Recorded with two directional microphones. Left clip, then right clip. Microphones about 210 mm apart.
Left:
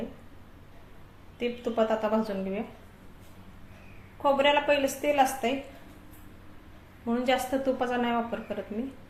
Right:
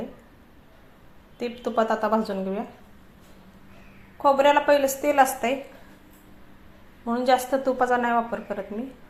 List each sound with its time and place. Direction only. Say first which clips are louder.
1.4 s a woman's voice: right 3 dB; 25° right (ahead or behind)
4.2 s a woman's voice: right 5 dB; 20° right (ahead or behind)
7.0 s a woman's voice: right 5 dB; 15° right (ahead or behind)